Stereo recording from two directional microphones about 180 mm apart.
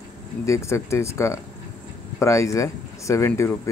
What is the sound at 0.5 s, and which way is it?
Speech, 15° left (ahead or behind).